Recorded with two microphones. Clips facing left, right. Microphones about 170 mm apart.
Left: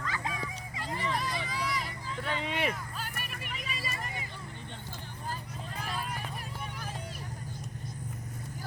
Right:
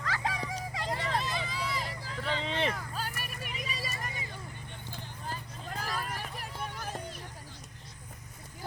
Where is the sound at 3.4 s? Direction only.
40° right (ahead or behind).